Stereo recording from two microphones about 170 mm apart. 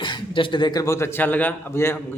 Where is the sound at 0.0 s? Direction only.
30° left (ahead or behind).